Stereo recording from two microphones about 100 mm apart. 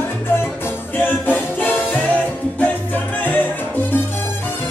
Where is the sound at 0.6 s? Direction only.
20° left (ahead or behind).